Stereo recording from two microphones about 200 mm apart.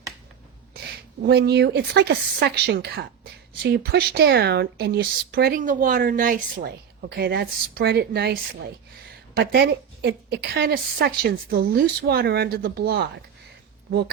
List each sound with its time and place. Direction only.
1.2 s speech: 55° right (ahead or behind)